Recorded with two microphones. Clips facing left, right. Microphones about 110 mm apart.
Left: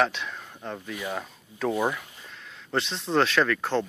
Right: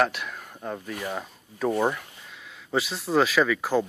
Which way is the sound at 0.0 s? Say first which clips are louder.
Right 1 dB; 5° right (ahead or behind).